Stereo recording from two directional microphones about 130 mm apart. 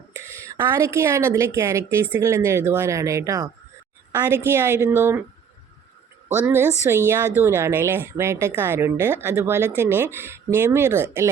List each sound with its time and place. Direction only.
0.1 s speech: 20° right (ahead or behind)
4.1 s speech: 15° right (ahead or behind)
6.2 s a woman's voice: 15° right (ahead or behind)